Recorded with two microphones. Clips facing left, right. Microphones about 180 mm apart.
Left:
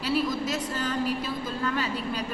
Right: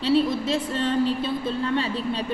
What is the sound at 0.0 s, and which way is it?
A woman's voice, 25° right (ahead or behind).